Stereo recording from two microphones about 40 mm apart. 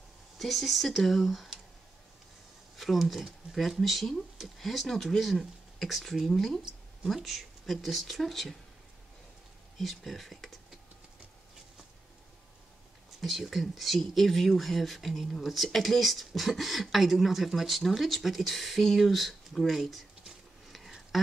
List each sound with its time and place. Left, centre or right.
0.4 s speech: centre
2.8 s speech: centre
9.8 s speech: centre
13.2 s speech: centre
19.7 s a sound: centre
21.1 s speech: centre